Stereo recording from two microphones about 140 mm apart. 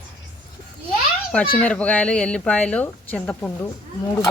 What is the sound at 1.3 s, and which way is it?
Speech, 10° left (ahead or behind).